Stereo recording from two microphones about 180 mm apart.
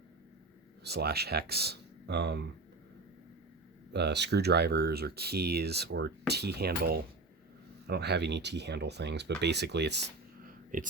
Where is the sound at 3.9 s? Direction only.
70° right (ahead or behind).